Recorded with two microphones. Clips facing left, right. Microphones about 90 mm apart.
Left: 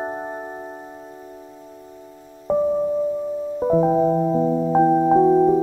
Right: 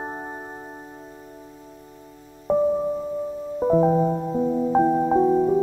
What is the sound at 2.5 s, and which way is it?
Music, centre (ahead or behind).